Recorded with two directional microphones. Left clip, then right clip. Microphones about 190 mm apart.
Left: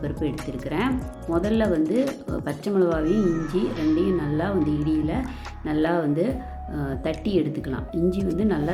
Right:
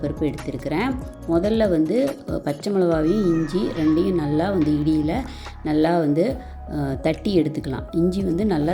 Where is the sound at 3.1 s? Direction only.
Centre (ahead or behind).